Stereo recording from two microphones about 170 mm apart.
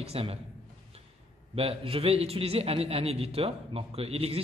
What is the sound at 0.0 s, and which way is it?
Speech, 35° right (ahead or behind).